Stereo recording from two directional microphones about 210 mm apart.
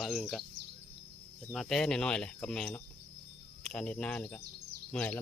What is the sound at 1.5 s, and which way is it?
Speech, centre (ahead or behind).